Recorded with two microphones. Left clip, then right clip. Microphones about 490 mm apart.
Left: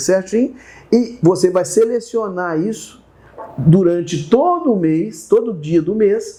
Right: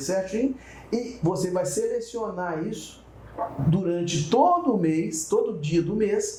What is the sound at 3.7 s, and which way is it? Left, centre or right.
Speech, left.